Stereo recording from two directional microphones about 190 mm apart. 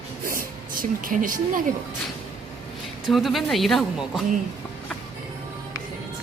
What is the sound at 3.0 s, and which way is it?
Speech, centre (ahead or behind).